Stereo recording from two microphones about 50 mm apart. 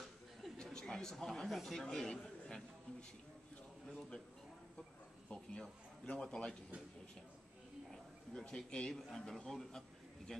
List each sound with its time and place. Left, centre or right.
0.7 s a man's voice: centre
5.3 s a man's voice: centre
8.4 s a man's voice: centre